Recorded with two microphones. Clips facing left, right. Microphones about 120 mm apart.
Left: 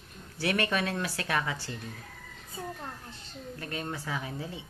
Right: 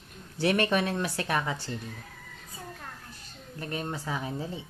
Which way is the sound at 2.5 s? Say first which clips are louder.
Left 5 dB; 25° left (ahead or behind).